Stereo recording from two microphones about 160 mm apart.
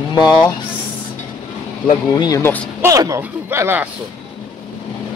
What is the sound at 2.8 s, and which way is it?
Speech, 20° right (ahead or behind).